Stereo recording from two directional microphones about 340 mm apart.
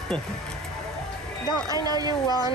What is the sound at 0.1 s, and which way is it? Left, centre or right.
Speech, centre.